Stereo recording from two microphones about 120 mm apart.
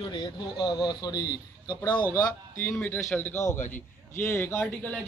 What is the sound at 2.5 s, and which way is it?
A man's voice, 15° left (ahead or behind).